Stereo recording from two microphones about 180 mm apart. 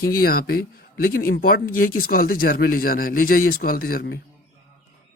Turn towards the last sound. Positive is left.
turn(degrees=55)  # may be behind; listen again after turning